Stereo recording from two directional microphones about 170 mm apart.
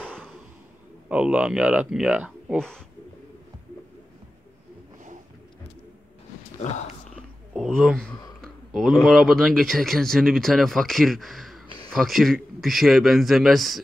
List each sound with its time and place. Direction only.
1.0 s speech: 5° right (ahead or behind)
7.2 s a sound: centre (ahead or behind)
8.4 s speech: centre (ahead or behind)